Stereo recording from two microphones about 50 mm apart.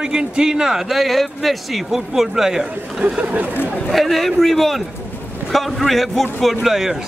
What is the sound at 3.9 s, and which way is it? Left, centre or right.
A man's voice, centre.